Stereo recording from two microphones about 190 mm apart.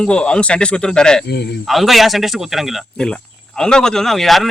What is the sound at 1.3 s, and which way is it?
Speech, 60° left (ahead or behind).